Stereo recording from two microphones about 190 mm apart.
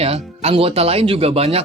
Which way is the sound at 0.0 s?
30° right (ahead or behind).